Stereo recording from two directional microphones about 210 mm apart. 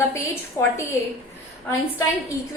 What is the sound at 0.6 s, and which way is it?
Speech, 10° left (ahead or behind).